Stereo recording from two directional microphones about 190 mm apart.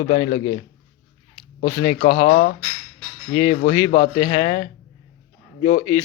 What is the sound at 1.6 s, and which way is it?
Speech, 25° left (ahead or behind).